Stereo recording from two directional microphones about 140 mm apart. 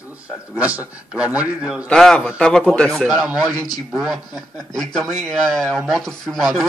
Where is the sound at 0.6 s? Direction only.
10° right (ahead or behind).